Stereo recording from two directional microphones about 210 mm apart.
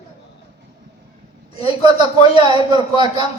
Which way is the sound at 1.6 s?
20° right (ahead or behind).